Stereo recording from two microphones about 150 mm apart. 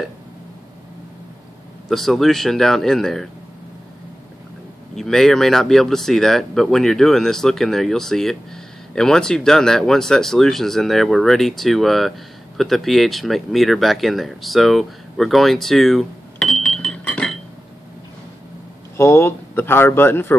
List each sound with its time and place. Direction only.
1.9 s speech: centre (ahead or behind)
4.9 s speech: centre (ahead or behind)
18.9 s speech: 15° left (ahead or behind)